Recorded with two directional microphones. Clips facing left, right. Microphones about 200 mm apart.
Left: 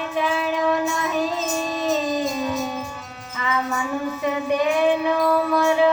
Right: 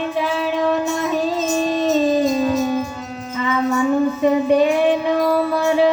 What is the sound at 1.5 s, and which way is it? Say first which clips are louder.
Music: right 5 dB; 25° right (ahead or behind).